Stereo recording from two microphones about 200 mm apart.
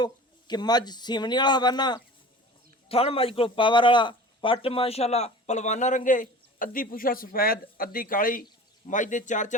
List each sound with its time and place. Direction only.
0.0 s a man's voice: 20° left (ahead or behind); by 9.6 s 40° left (ahead or behind)